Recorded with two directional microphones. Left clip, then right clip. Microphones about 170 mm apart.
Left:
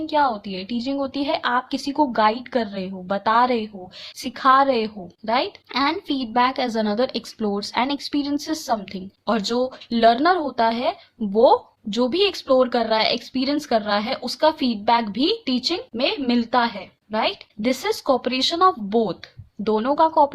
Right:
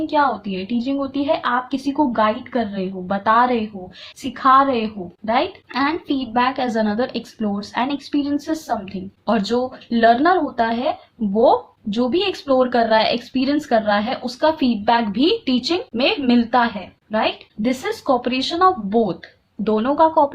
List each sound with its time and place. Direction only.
0.1 s a woman's voice: 30° left (ahead or behind)